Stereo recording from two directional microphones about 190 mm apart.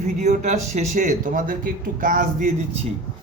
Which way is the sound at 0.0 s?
35° right (ahead or behind).